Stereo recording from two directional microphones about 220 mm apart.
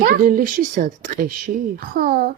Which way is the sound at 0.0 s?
40° right (ahead or behind).